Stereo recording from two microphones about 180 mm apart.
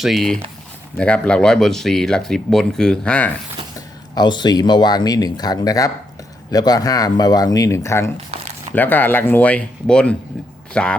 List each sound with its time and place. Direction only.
0.0 s speech: centre (ahead or behind)
3.8 s speech: 25° left (ahead or behind); by 10.9 s 5° left (ahead or behind)